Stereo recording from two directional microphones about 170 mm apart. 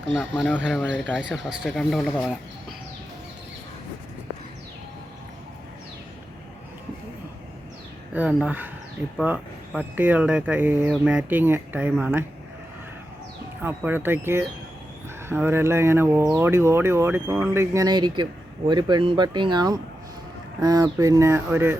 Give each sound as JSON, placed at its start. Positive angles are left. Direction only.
{"t": 0.2, "sound": "speech", "side_deg": 5}
{"t": 8.1, "sound": "speech", "side_deg": -10}
{"t": 13.6, "sound": "speech", "side_deg": -10}